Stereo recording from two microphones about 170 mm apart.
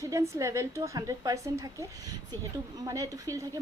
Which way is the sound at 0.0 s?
20° right (ahead or behind).